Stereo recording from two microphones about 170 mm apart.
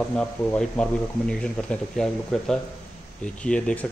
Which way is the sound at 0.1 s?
10° left (ahead or behind).